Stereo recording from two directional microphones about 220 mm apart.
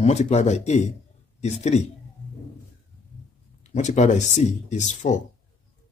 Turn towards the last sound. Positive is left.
turn(degrees=35)  # may be behind; listen again after turning